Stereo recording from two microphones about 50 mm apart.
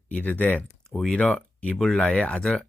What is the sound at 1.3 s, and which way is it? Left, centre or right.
Speech, left.